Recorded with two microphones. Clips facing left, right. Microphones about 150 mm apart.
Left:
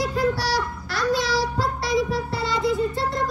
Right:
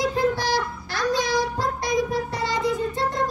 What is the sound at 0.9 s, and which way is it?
Child singing, 20° right (ahead or behind).